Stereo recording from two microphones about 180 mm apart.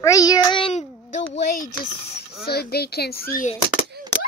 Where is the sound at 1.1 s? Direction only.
40° left (ahead or behind).